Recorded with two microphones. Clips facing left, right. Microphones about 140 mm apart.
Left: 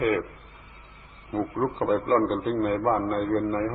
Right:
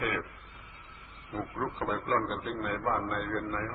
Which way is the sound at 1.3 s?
40° left (ahead or behind).